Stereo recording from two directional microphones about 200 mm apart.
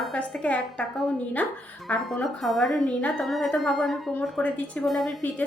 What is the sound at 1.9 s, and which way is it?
A woman's voice, 5° left (ahead or behind).